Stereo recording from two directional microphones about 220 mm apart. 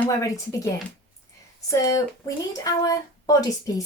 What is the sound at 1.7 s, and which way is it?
A woman's voice, 15° left (ahead or behind).